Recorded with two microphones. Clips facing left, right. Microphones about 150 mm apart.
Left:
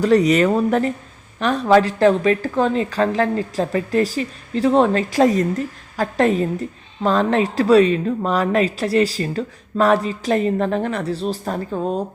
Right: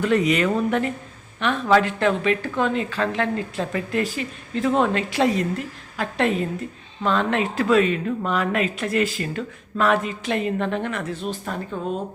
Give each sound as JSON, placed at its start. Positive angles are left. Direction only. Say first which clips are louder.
{"t": 0.0, "sound": "a woman's voice", "louder": "left 5 dB", "side_deg": 40}